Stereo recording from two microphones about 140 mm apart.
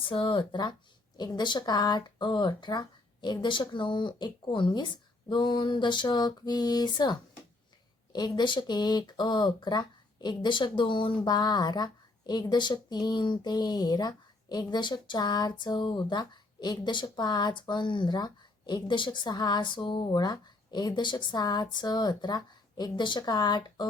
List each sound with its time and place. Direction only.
0.0 s speech: 40° left (ahead or behind)